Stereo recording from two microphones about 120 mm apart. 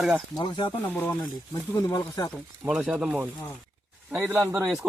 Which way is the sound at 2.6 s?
5° right (ahead or behind).